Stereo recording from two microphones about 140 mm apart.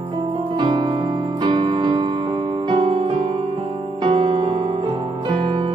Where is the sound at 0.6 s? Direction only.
35° right (ahead or behind).